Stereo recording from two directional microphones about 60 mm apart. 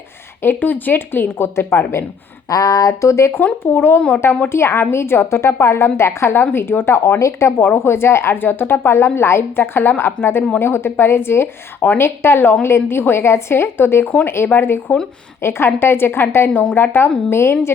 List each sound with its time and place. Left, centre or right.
0.4 s speech: left
2.5 s speech: left
3.4 s a woman's voice: left
7.8 s speech: left
10.2 s speech: centre
10.6 s speech: left
11.8 s a woman's voice: left
12.0 s speech: left